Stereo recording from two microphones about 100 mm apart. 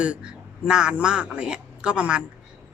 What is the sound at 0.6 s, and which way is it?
A woman's voice, 10° right (ahead or behind).